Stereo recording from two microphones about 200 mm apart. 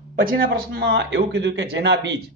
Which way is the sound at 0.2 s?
45° right (ahead or behind).